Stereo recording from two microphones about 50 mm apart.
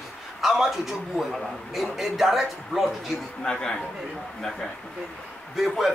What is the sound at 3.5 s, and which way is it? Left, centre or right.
Speech, centre.